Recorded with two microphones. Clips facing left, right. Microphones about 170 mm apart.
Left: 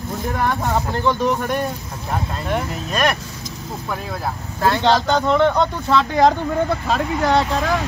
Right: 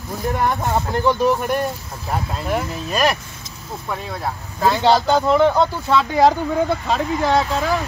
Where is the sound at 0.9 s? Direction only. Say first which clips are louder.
Right 4 dB; 10° right (ahead or behind).